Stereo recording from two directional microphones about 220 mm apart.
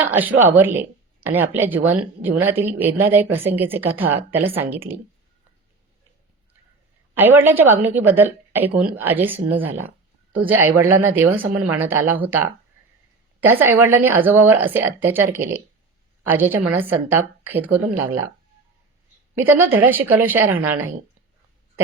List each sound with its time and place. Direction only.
0.0 s speech: 10° right (ahead or behind)
7.2 s speech: 10° right (ahead or behind)
13.4 s speech: 10° right (ahead or behind)
19.4 s speech: 10° right (ahead or behind)